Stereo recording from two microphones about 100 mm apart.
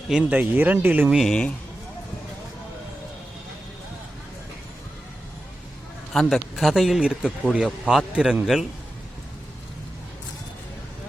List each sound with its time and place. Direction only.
0.1 s a man's voice: 10° right (ahead or behind)
1.1 s speech: 5° left (ahead or behind)
6.1 s a man's voice: centre (ahead or behind)